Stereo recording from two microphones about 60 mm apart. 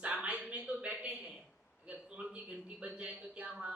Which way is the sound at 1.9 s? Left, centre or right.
Right.